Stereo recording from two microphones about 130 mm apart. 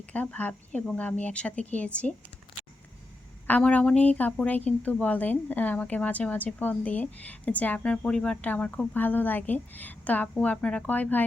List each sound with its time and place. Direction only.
0.1 s a woman's voice: 10° left (ahead or behind)
3.4 s a woman's voice: 10° left (ahead or behind)